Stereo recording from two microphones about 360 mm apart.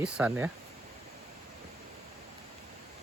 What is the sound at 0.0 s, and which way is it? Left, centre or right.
Speech, centre.